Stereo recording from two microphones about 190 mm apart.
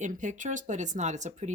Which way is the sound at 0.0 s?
40° right (ahead or behind).